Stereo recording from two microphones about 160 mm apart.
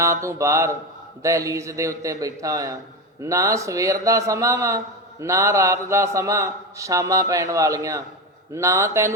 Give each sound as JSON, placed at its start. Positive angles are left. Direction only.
{"t": 0.0, "sound": "a man's voice", "side_deg": -15}